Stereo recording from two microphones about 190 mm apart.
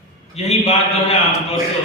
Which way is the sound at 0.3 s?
35° left (ahead or behind).